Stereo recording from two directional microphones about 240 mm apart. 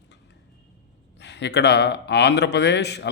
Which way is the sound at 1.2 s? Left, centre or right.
Left.